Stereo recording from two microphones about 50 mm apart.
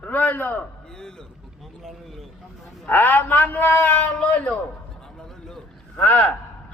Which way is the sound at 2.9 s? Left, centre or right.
Left.